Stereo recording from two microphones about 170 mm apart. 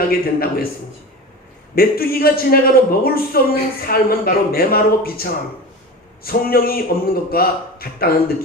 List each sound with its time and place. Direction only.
0.1 s a man's voice: 60° left (ahead or behind)
1.7 s a man's voice: 60° left (ahead or behind)